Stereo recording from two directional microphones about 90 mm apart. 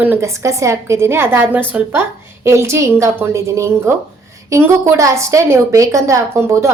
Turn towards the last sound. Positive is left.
turn(degrees=-35)  # may be behind; listen again after turning